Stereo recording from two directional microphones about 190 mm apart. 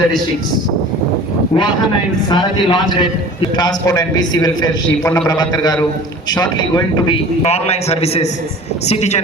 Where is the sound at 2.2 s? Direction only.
25° left (ahead or behind).